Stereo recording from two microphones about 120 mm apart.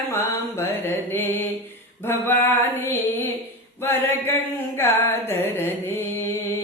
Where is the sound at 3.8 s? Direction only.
20° left (ahead or behind).